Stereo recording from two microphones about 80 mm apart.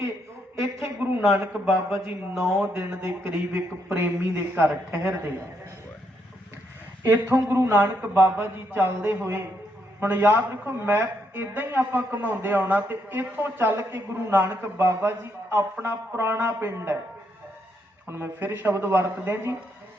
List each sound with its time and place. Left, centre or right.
0.5 s a man's voice: right
1.2 s a man's voice: centre
2.7 s a woman's voice: right
7.0 s a woman's voice: right
18.1 s a woman's voice: right